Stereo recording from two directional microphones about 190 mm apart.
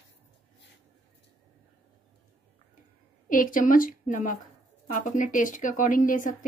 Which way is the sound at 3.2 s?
45° left (ahead or behind).